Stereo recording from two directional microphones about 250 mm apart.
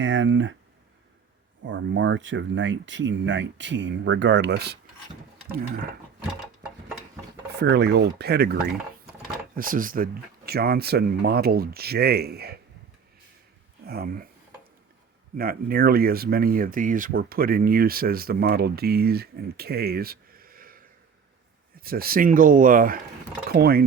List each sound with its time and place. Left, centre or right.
0.0 s speech: right
1.6 s speech: right
7.5 s speech: right
13.8 s speech: right
15.4 s speech: right